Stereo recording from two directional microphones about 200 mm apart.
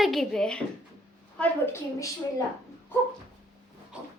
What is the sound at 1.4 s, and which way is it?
Speech, 10° left (ahead or behind).